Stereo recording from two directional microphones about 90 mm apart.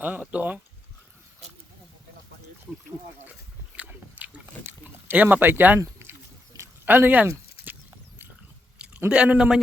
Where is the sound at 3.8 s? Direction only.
15° right (ahead or behind).